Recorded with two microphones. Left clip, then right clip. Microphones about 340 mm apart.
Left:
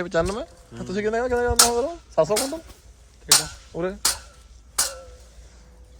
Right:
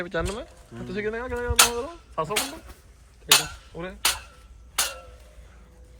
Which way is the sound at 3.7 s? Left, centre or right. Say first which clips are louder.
Left 9 dB; left.